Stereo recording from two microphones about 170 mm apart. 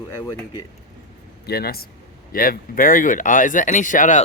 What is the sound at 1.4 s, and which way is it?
A man's voice, 65° left (ahead or behind).